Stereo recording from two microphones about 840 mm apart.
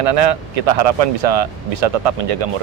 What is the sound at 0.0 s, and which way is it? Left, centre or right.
Speech, right.